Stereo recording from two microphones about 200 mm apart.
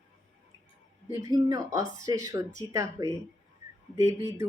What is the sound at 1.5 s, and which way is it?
Speech, 15° right (ahead or behind).